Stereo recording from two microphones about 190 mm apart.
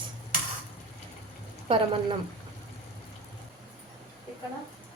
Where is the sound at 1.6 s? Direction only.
25° right (ahead or behind).